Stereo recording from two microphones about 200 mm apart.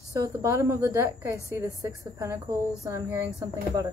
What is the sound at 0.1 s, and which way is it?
A woman's voice, 15° right (ahead or behind).